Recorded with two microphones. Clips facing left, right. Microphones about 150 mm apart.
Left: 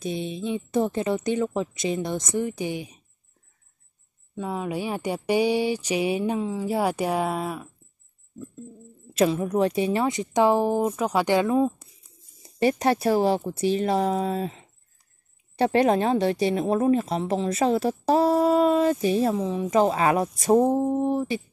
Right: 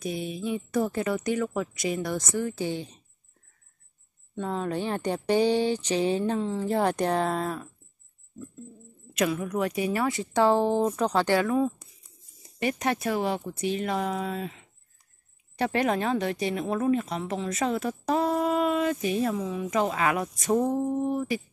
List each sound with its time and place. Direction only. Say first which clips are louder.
0.0 s speech: left 2 dB; 25° left (ahead or behind)
4.4 s speech: left 1 dB; 10° left (ahead or behind)
9.1 s speech: left 5 dB; 30° left (ahead or behind)
12.4 s a woman's voice: left 6 dB; 35° left (ahead or behind)